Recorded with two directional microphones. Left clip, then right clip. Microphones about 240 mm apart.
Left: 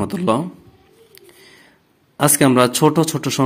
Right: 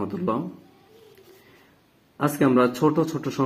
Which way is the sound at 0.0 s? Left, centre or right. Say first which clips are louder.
Left 8 dB; left.